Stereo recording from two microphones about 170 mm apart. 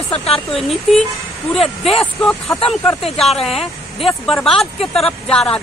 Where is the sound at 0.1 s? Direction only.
35° left (ahead or behind).